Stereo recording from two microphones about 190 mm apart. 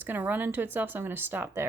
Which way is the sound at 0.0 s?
10° right (ahead or behind).